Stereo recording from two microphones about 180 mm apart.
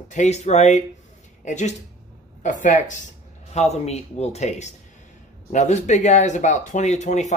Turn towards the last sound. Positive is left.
turn(degrees=40)  # may be behind; listen again after turning